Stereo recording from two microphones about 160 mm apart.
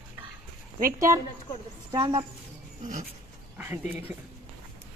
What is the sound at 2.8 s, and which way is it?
Dog, 50° right (ahead or behind).